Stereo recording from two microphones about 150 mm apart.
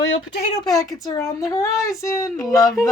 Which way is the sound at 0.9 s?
25° left (ahead or behind).